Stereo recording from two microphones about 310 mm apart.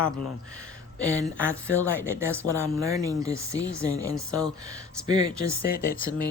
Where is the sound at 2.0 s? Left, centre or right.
Centre.